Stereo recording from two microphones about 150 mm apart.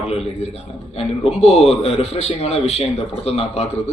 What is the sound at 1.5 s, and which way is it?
A man's voice, 45° left (ahead or behind).